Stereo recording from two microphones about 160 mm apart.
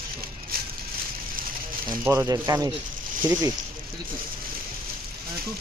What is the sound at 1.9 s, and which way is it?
Speech, 15° right (ahead or behind).